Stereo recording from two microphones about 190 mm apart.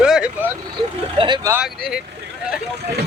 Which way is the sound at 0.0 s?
5° right (ahead or behind).